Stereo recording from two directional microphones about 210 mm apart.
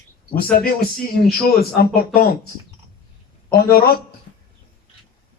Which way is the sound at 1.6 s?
45° left (ahead or behind).